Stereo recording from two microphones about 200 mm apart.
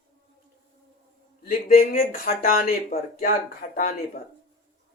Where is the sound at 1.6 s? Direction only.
45° left (ahead or behind).